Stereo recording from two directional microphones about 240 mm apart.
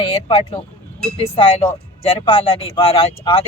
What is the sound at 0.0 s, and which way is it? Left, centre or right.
Speech, left.